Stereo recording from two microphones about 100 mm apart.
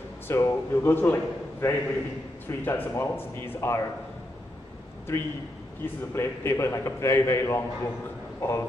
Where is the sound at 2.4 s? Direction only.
25° left (ahead or behind).